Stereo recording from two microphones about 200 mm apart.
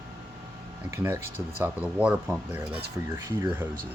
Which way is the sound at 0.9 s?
10° right (ahead or behind).